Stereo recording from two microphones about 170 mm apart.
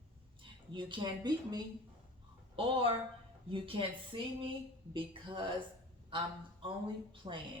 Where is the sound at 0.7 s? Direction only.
30° right (ahead or behind).